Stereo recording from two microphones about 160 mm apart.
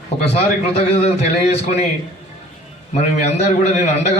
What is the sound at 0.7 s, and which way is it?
A man's voice, 40° left (ahead or behind).